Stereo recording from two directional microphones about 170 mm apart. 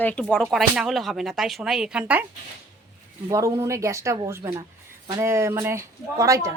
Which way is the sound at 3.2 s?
20° right (ahead or behind).